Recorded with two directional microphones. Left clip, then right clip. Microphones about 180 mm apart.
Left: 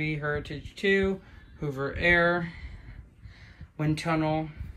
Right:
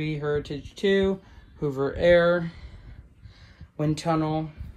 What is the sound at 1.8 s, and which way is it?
Speech, 15° right (ahead or behind).